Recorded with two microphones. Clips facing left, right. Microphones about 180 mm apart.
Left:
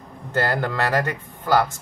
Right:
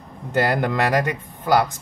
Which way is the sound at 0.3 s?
15° right (ahead or behind).